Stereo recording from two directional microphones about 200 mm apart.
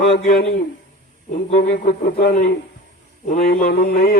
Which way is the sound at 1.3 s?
35° left (ahead or behind).